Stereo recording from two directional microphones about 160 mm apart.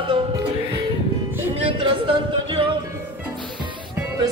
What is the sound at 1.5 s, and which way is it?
Music, 35° right (ahead or behind).